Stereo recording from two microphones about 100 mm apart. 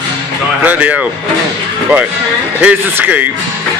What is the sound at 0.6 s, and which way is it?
Speech, 15° right (ahead or behind).